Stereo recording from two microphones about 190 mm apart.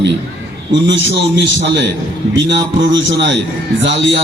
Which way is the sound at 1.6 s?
70° right (ahead or behind).